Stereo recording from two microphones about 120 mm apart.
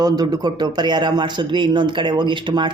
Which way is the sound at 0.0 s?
35° right (ahead or behind).